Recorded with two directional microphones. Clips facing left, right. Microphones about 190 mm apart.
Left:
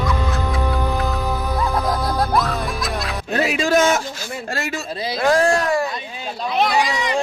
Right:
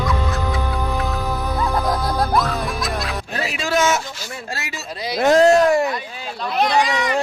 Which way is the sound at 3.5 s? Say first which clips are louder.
Left 4 dB; 50° left (ahead or behind).